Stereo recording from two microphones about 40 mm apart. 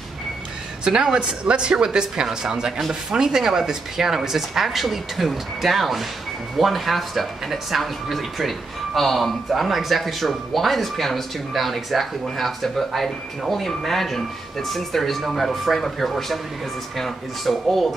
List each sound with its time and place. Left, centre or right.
0.8 s speech: centre
1.4 s speech: right; by 17.9 s centre